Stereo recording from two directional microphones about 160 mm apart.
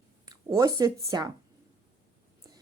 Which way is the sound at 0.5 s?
20° right (ahead or behind).